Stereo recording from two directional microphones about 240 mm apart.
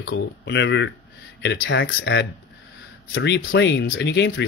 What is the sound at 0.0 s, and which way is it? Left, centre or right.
Speech, left.